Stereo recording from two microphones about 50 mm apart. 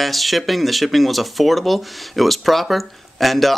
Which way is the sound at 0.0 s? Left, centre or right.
Centre.